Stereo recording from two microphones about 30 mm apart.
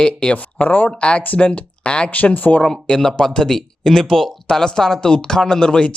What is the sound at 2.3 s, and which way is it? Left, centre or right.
Speech, left.